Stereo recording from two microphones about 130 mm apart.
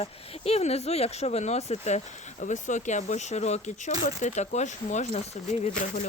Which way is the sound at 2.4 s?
70° left (ahead or behind).